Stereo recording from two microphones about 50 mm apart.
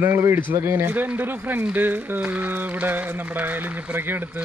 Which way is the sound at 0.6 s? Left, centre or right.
Right.